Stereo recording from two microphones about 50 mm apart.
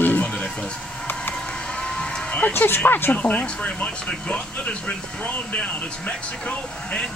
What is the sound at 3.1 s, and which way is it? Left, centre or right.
Speech, left.